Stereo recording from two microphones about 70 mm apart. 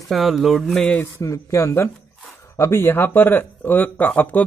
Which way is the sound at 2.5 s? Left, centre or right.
Left.